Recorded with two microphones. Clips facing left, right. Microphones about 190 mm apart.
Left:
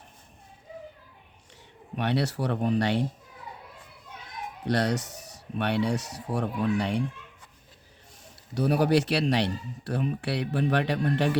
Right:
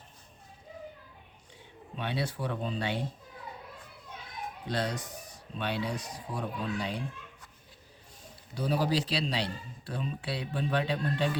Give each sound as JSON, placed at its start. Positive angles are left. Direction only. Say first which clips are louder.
{"t": 2.0, "sound": "a man's voice", "louder": "left 6 dB", "side_deg": 70}
{"t": 4.6, "sound": "a man's voice", "louder": "left 7 dB", "side_deg": 75}
{"t": 8.5, "sound": "a man's voice", "louder": "left 6 dB", "side_deg": 70}